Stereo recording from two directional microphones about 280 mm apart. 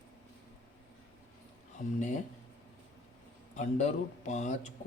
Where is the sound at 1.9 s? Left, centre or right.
Left.